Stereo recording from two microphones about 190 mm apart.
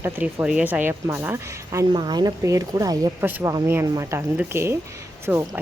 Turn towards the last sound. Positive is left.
turn(degrees=-5)  # may be behind; listen again after turning